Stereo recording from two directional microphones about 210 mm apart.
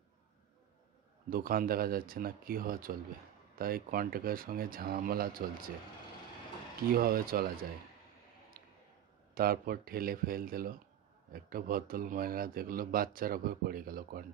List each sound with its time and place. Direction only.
1.3 s a man's voice: 45° right (ahead or behind)
6.9 s a man's voice: 45° right (ahead or behind)
9.3 s a man's voice: 45° right (ahead or behind)